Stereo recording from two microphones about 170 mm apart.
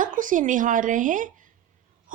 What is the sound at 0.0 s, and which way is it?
Speech, 50° right (ahead or behind).